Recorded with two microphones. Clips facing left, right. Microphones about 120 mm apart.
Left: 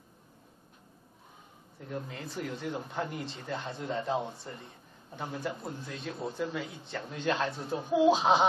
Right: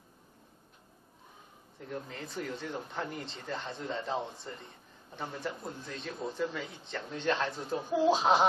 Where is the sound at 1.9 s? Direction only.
5° left (ahead or behind).